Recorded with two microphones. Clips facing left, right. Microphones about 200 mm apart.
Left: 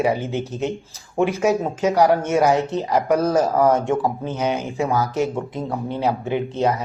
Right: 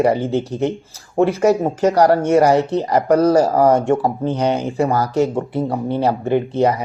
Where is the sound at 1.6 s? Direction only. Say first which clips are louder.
Right 3 dB; 15° right (ahead or behind).